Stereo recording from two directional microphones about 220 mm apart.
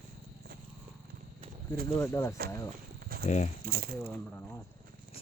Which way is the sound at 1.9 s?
15° left (ahead or behind).